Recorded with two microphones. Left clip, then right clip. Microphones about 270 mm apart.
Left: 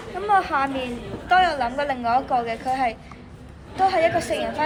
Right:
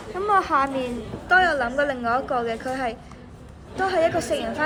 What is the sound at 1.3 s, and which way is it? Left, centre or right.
A woman's voice, right.